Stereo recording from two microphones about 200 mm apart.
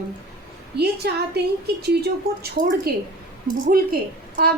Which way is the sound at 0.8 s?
55° right (ahead or behind).